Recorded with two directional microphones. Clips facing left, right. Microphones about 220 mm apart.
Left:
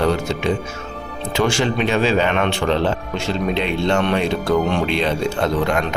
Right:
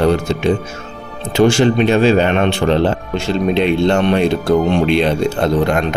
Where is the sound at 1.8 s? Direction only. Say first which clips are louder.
Right 3 dB; 45° right (ahead or behind).